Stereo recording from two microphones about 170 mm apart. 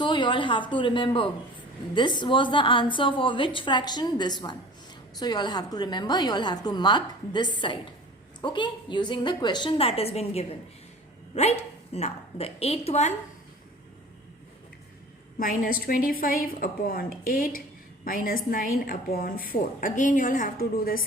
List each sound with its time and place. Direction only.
0.0 s a woman's voice: 30° left (ahead or behind)
11.9 s a woman's voice: 40° left (ahead or behind)
15.4 s a woman's voice: 55° left (ahead or behind)